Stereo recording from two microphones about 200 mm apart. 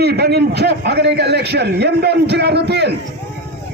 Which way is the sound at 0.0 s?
55° right (ahead or behind).